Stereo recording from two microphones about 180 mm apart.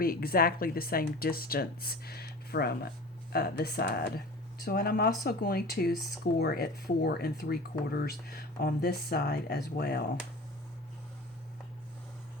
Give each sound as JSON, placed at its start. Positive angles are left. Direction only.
{"t": 0.0, "sound": "speech", "side_deg": 55}